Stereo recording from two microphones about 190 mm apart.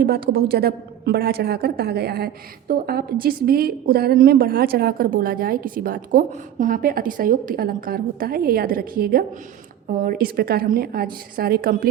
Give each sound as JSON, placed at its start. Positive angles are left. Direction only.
{"t": 0.0, "sound": "a woman's voice", "side_deg": -55}